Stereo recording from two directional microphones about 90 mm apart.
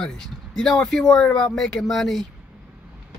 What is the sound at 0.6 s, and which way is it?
Speech, 5° left (ahead or behind).